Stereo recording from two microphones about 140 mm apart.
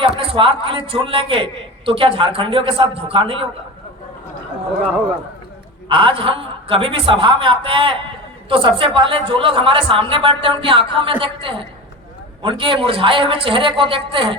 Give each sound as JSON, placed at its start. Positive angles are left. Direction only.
{"t": 0.0, "sound": "a man's voice", "side_deg": -40}
{"t": 5.9, "sound": "a man's voice", "side_deg": -35}